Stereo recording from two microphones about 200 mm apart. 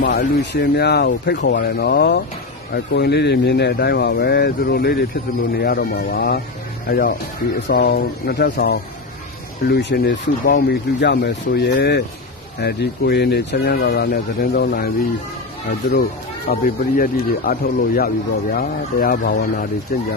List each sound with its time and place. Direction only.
0.0 s speech: 40° left (ahead or behind)
0.5 s speech: 55° left (ahead or behind)
16.4 s speech: 45° left (ahead or behind)